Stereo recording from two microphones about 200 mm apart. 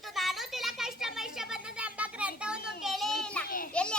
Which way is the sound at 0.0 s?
Centre (ahead or behind).